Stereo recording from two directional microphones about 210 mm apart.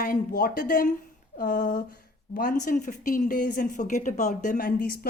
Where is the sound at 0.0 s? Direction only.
40° left (ahead or behind).